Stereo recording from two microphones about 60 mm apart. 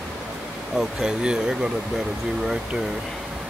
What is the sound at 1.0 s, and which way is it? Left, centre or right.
Speech, centre.